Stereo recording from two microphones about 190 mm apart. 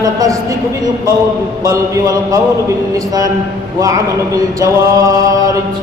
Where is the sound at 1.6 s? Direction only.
20° right (ahead or behind).